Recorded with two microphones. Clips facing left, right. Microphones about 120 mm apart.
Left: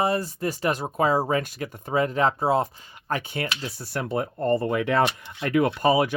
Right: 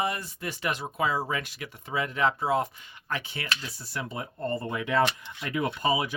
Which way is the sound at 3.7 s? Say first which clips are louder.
Left 8 dB; 60° left (ahead or behind).